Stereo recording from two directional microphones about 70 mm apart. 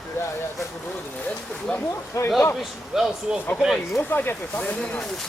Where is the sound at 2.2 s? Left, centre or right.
Left.